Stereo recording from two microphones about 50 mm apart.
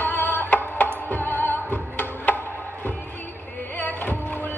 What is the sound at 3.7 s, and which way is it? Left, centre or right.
Music, left.